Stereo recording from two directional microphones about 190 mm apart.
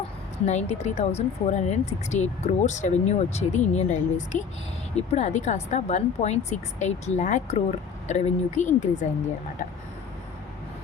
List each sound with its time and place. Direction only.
0.4 s speech: 35° left (ahead or behind)